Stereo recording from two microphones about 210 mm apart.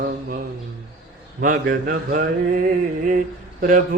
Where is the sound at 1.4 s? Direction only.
40° right (ahead or behind).